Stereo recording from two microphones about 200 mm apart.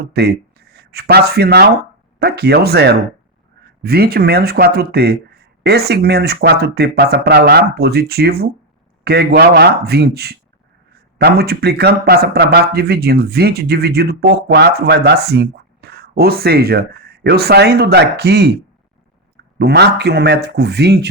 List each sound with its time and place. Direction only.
0.0 s speech: 55° right (ahead or behind)
19.5 s speech: 55° right (ahead or behind)